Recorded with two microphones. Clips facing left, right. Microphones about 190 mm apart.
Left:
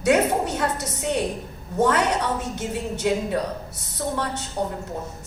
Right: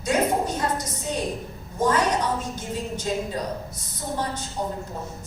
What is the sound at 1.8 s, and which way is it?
A woman's voice, 65° left (ahead or behind).